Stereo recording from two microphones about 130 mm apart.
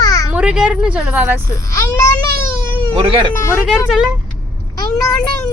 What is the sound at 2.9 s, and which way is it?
Speech, 45° right (ahead or behind).